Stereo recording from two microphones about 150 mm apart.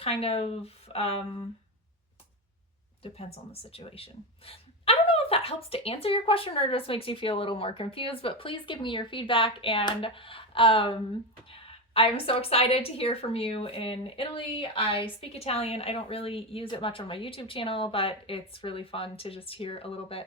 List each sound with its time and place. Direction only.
0.0 s a woman's voice: 40° left (ahead or behind)
3.0 s a woman's voice: 45° left (ahead or behind)
11.9 s a woman's voice: 40° left (ahead or behind)